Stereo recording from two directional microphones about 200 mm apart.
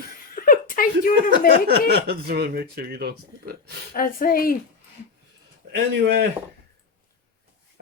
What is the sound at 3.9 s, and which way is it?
Speech, 45° left (ahead or behind).